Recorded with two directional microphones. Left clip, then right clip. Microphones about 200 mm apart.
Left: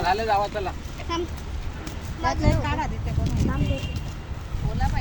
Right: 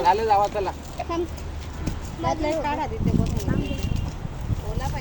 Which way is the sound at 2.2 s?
40° left (ahead or behind).